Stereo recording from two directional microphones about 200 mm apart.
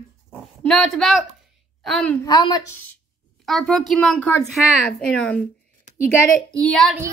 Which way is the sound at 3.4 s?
Centre (ahead or behind).